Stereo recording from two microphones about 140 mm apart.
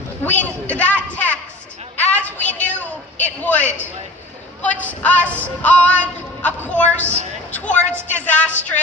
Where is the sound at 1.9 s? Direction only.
10° left (ahead or behind).